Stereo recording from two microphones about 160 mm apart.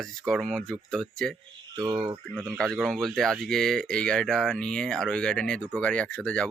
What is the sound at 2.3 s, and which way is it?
Speech, 15° right (ahead or behind).